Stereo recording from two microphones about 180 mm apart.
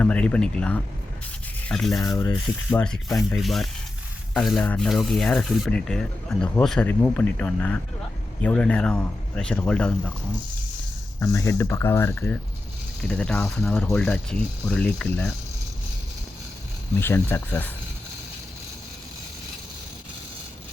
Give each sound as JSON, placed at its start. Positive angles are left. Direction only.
{"t": 0.0, "sound": "speech", "side_deg": 5}
{"t": 11.2, "sound": "speech", "side_deg": 15}
{"t": 17.0, "sound": "speech", "side_deg": 10}